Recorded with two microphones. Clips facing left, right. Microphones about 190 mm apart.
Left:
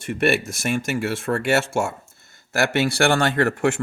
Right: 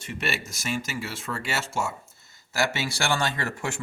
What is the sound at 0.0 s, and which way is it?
Speech, 55° left (ahead or behind).